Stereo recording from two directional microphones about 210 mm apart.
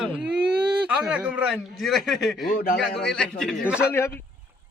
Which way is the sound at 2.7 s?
Centre (ahead or behind).